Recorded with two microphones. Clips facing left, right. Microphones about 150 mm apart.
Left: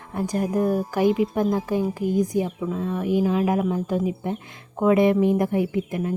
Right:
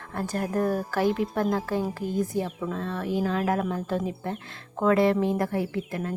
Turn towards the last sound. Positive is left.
turn(degrees=15)  # may be behind; listen again after turning